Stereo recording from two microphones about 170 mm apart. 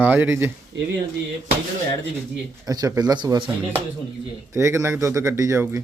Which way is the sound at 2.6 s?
20° right (ahead or behind).